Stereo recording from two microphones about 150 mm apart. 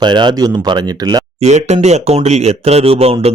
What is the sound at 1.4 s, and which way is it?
Speech, 45° right (ahead or behind).